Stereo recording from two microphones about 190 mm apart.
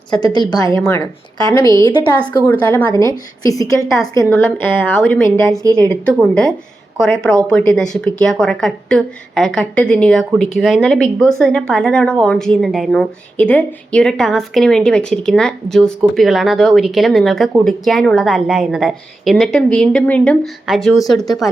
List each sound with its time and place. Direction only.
0.1 s a woman's voice: 20° left (ahead or behind)
2.2 s a woman's voice: 10° left (ahead or behind)